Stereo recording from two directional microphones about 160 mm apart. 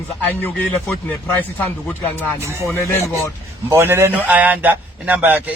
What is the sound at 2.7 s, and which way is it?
Speech, 15° left (ahead or behind).